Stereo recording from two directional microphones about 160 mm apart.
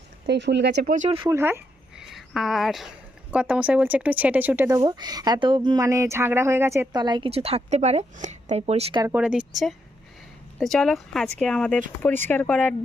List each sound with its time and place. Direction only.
0.3 s speech: 90° right; by 1.1 s 55° right (ahead or behind)
1.3 s speech: 15° right (ahead or behind)
2.0 s a sound: centre (ahead or behind)
3.3 s speech: 10° right (ahead or behind); by 7.3 s 25° right (ahead or behind)
7.3 s speech: 40° right (ahead or behind)
9.1 s speech: 5° right (ahead or behind)
10.6 s speech: centre (ahead or behind)